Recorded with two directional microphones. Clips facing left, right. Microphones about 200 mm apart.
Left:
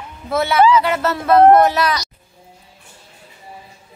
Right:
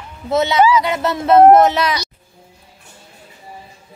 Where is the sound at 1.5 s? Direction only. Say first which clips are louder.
Right 1 dB; 20° right (ahead or behind).